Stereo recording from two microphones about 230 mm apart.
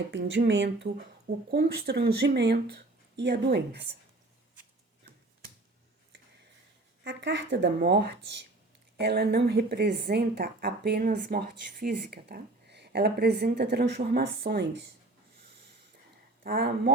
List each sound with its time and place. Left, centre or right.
0.1 s a woman's voice: right
7.0 s a woman's voice: right
16.4 s a woman's voice: right